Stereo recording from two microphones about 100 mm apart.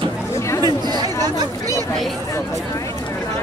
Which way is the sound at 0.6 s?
45° right (ahead or behind).